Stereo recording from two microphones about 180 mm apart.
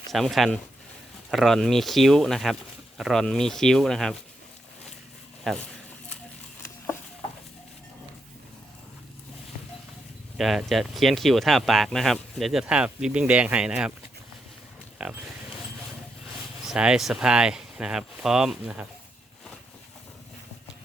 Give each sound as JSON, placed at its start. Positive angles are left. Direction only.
{"t": 0.1, "sound": "speech", "side_deg": 0}
{"t": 5.4, "sound": "a sound", "side_deg": 0}
{"t": 10.3, "sound": "speech", "side_deg": 0}
{"t": 15.0, "sound": "speech", "side_deg": -5}
{"t": 16.6, "sound": "speech", "side_deg": -5}